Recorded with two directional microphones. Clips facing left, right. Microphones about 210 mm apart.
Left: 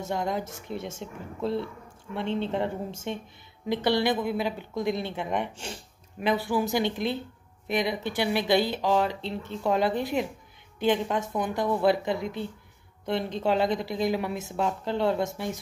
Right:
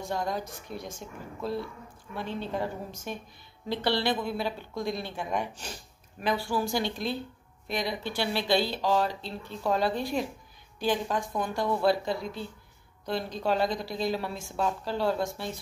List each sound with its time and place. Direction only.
0.0 s speech: 20° left (ahead or behind)